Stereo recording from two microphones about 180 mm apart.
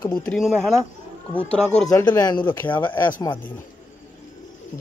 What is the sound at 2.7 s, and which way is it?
Speech, 25° left (ahead or behind).